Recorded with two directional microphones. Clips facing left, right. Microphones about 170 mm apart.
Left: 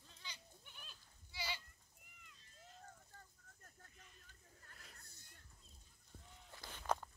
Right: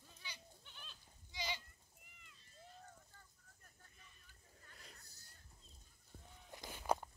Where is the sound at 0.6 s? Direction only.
10° left (ahead or behind).